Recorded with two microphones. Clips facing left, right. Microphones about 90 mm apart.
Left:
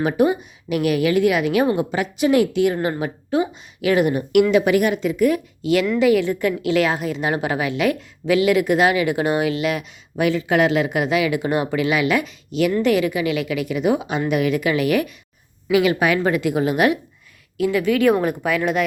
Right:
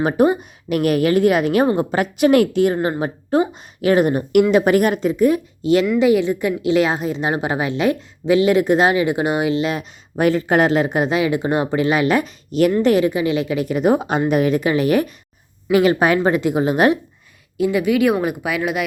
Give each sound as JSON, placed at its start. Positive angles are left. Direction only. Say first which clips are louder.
{"t": 0.0, "sound": "a woman's voice", "louder": "right 2 dB", "side_deg": -35}
{"t": 2.5, "sound": "a woman's voice", "louder": "right 2 dB", "side_deg": -40}
{"t": 17.6, "sound": "speech", "louder": "right 1 dB", "side_deg": -20}